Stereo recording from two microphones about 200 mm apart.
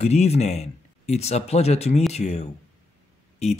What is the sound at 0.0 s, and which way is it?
Speech, 35° left (ahead or behind).